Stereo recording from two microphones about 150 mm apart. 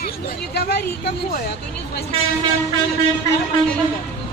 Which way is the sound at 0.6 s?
90° left.